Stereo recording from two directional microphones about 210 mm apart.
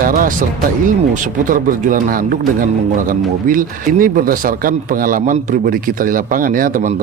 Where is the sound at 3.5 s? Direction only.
40° right (ahead or behind).